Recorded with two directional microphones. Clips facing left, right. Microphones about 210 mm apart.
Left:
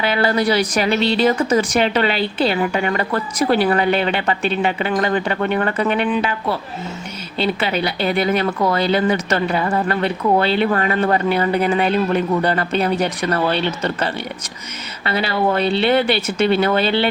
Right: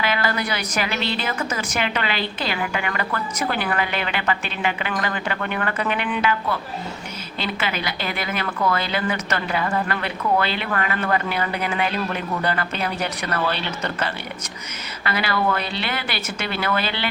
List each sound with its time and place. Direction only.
0.0 s a woman's voice: 30° left (ahead or behind)